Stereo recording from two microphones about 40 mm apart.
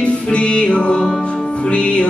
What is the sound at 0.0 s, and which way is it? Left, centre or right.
Music, left.